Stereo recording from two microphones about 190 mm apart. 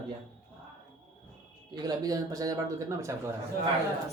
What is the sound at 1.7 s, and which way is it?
Speech, 20° right (ahead or behind).